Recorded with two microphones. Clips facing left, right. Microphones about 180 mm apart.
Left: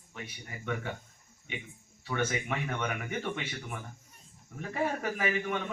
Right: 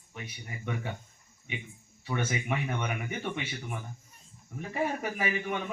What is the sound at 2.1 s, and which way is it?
A man's voice, 15° right (ahead or behind).